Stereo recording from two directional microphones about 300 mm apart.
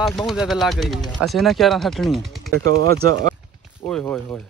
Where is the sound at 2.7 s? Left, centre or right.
Right.